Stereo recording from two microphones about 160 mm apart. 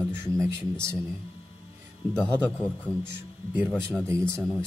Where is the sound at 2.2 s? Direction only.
10° left (ahead or behind).